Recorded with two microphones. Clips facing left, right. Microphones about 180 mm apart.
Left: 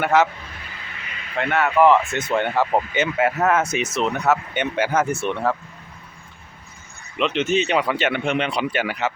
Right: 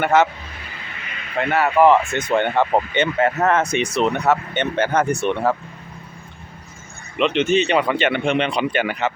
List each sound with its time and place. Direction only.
0.0 s speech: centre (ahead or behind)
1.4 s speech: centre (ahead or behind)
7.2 s speech: centre (ahead or behind)